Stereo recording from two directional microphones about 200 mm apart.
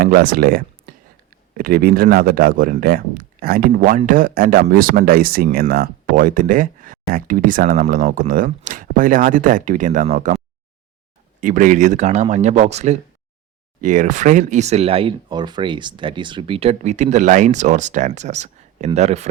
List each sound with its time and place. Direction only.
0.0 s speech: 45° right (ahead or behind)
11.3 s speech: 40° right (ahead or behind)